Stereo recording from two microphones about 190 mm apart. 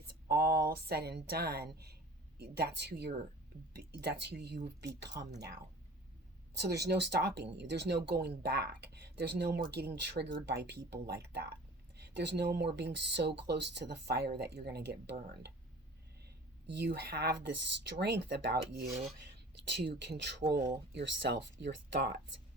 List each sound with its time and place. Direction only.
0.3 s speech: 55° right (ahead or behind)
5.0 s speech: 20° right (ahead or behind)
6.6 s speech: 60° right (ahead or behind)
16.2 s speech: 60° right (ahead or behind)
19.6 s speech: 65° right (ahead or behind)